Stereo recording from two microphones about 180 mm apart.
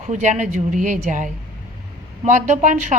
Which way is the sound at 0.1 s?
45° right (ahead or behind).